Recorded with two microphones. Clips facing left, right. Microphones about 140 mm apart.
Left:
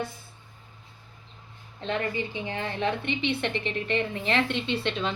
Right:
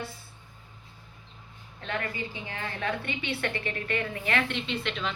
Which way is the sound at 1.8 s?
25° left (ahead or behind).